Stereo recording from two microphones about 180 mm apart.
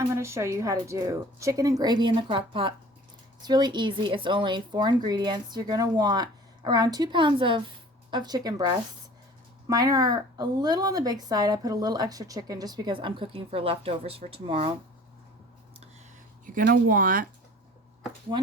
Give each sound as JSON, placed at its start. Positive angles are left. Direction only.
{"t": 0.0, "sound": "speech", "side_deg": -15}
{"t": 16.7, "sound": "speech", "side_deg": -50}